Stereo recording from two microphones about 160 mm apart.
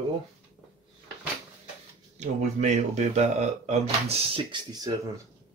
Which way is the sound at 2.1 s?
45° right (ahead or behind).